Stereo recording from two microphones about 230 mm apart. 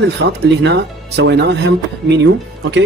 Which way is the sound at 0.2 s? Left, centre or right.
Right.